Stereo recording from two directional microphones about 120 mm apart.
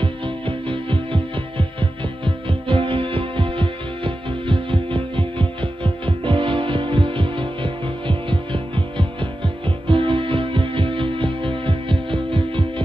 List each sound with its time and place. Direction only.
0.0 s music: 45° right (ahead or behind)